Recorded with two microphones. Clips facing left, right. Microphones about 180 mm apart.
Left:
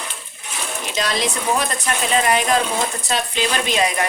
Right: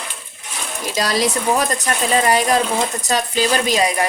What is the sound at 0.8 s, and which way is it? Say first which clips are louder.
A woman's voice: right 4 dB; 40° right (ahead or behind).